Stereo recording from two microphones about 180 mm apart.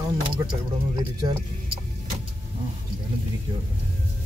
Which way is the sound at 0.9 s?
20° right (ahead or behind).